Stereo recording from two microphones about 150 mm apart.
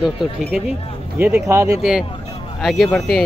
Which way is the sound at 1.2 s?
15° right (ahead or behind).